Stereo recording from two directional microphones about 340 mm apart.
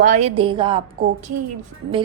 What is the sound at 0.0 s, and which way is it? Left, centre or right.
Speech, right.